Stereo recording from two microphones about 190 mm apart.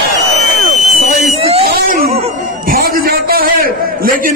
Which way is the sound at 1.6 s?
55° right (ahead or behind).